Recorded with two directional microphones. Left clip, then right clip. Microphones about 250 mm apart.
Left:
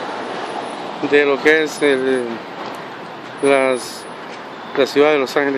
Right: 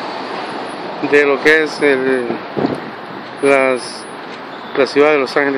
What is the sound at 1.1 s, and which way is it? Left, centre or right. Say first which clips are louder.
Speech: right 2 dB; centre.